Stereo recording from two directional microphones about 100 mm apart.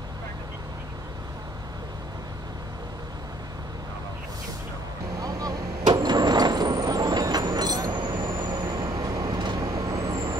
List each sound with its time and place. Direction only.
5.2 s vehicle: 40° right (ahead or behind)
9.6 s vehicle: 35° right (ahead or behind)